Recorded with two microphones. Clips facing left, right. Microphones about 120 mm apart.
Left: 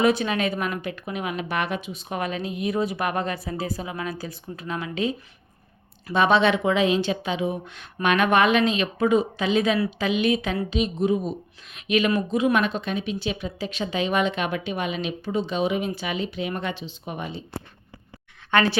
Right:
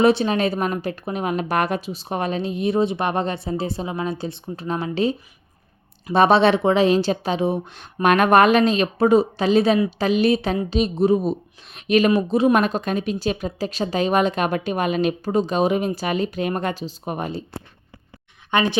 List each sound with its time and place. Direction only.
0.0 s speech: 30° right (ahead or behind)
6.1 s speech: 35° right (ahead or behind)
18.5 s a woman's voice: 20° right (ahead or behind)